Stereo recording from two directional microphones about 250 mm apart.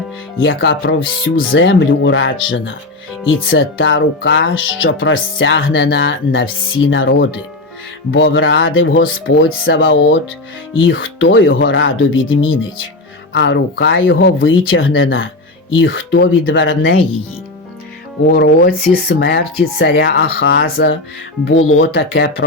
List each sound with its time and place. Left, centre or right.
0.4 s speech: left
18.3 s speech: left